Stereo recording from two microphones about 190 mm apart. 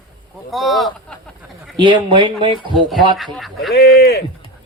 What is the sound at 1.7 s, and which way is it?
A man's voice, 25° right (ahead or behind).